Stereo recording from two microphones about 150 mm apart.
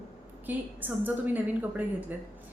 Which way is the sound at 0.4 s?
10° right (ahead or behind).